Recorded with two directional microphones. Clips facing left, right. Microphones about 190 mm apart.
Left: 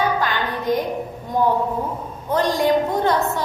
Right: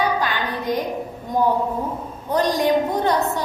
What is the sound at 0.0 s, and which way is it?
Music, 15° right (ahead or behind).